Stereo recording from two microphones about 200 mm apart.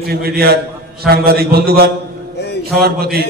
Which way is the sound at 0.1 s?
50° right (ahead or behind).